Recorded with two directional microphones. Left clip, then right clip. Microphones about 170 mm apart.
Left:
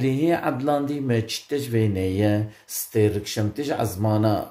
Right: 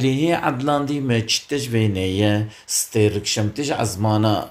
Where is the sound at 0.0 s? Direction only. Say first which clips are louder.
Right 3 dB; 5° left (ahead or behind).